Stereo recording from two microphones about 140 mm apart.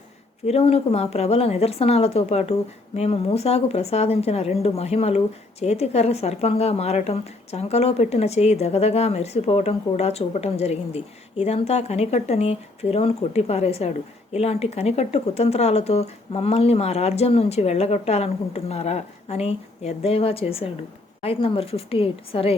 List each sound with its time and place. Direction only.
0.4 s a woman's voice: 45° left (ahead or behind)